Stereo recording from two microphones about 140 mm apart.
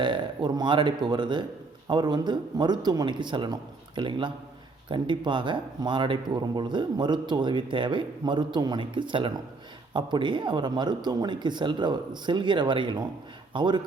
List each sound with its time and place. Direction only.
0.0 s speech: 30° right (ahead or behind)